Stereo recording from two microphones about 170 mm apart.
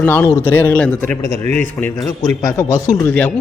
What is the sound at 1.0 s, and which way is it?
Speech, 45° right (ahead or behind).